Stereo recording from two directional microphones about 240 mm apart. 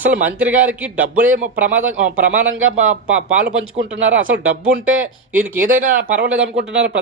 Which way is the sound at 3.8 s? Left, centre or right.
Right.